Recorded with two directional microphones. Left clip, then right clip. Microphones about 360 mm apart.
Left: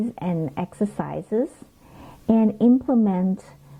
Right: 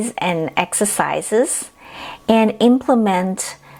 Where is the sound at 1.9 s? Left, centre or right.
Centre.